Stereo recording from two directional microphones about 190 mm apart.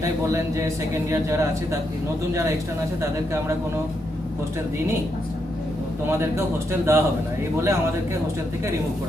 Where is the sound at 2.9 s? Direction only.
15° right (ahead or behind).